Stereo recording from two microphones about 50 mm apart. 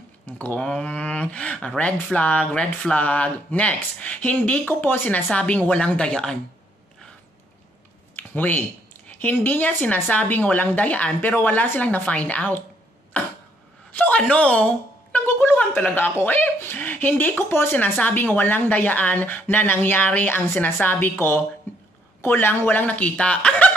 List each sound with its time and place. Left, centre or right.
0.6 s speech: left
8.2 s a sound: left
9.2 s speech: left
13.9 s a woman's voice: left
15.2 s a sound: left
15.9 s speech: left
17.9 s speech: left
20.2 s a woman's voice: left